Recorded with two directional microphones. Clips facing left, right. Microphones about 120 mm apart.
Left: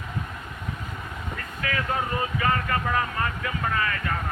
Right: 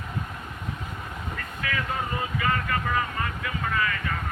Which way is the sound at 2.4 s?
45° left (ahead or behind).